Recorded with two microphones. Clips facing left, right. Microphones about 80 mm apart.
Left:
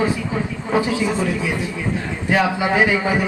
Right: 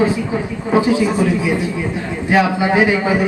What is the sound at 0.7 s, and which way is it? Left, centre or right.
Speech, right.